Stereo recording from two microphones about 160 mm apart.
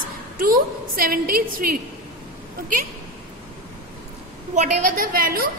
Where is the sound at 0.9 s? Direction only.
65° right (ahead or behind).